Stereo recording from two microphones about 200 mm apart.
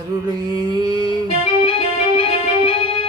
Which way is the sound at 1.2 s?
30° left (ahead or behind).